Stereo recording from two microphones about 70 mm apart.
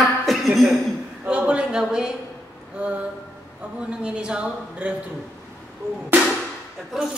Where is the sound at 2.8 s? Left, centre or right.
Centre.